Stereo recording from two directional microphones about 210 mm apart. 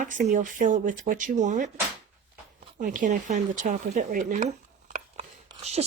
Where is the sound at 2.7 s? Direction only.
40° right (ahead or behind).